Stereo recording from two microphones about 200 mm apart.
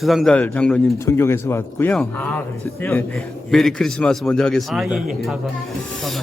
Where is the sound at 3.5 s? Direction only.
Centre (ahead or behind).